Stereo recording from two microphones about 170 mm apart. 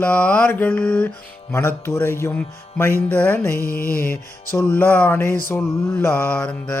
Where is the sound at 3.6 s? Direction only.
60° left (ahead or behind).